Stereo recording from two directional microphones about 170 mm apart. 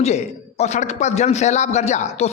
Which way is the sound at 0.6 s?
40° left (ahead or behind).